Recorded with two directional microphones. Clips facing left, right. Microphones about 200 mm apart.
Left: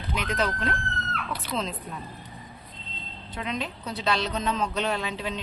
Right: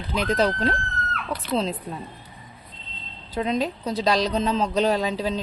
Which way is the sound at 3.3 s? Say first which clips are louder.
Right 8 dB; 35° right (ahead or behind).